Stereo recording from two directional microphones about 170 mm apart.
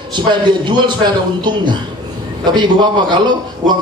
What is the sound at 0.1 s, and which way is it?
A man's voice, 25° right (ahead or behind).